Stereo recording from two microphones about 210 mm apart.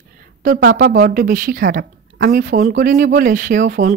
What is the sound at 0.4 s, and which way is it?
Speech, 45° right (ahead or behind).